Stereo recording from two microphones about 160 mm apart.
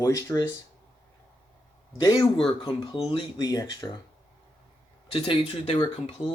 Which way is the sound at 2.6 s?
35° left (ahead or behind).